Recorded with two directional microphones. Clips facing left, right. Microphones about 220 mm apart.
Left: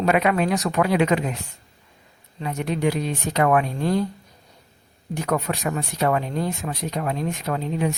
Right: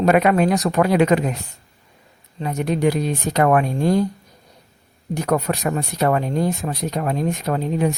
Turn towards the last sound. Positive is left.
turn(degrees=-45)  # may be behind; listen again after turning